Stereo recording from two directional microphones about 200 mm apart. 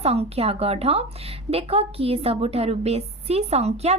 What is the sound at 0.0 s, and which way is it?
A woman's voice, 30° right (ahead or behind).